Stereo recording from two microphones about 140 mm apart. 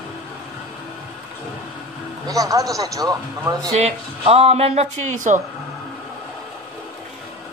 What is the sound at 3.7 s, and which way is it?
Speech, 50° right (ahead or behind).